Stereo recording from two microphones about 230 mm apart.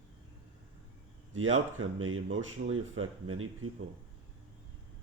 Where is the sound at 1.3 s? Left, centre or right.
Right.